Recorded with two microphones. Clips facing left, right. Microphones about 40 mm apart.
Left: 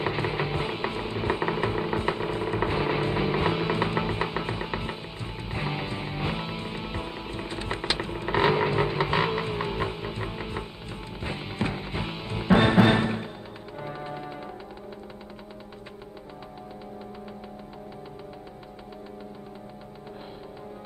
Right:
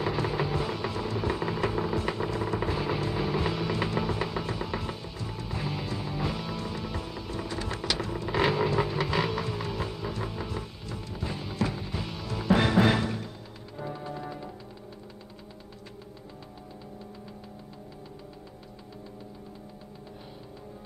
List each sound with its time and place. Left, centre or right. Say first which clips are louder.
0.0 s music: left 1 dB; left